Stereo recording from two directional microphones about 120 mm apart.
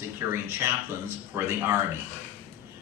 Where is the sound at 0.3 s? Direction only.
20° right (ahead or behind).